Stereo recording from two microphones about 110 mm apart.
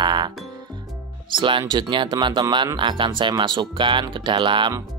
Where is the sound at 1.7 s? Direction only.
45° right (ahead or behind).